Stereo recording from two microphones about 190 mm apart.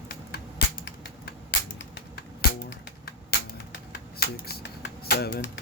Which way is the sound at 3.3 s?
60° left (ahead or behind).